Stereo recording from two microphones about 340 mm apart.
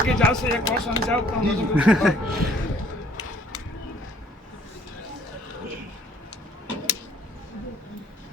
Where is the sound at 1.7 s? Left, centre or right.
Centre.